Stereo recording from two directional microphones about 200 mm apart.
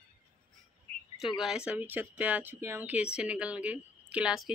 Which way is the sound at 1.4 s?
5° right (ahead or behind).